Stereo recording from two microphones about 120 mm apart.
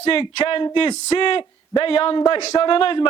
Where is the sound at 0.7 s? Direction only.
60° left (ahead or behind).